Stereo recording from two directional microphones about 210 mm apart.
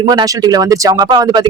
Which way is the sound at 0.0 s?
20° right (ahead or behind).